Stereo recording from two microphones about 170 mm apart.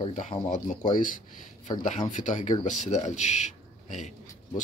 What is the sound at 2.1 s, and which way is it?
Speech, 50° left (ahead or behind).